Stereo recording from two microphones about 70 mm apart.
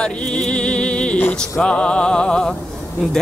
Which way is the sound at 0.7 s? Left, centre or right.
Centre.